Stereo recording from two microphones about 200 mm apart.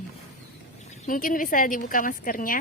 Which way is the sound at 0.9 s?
40° left (ahead or behind).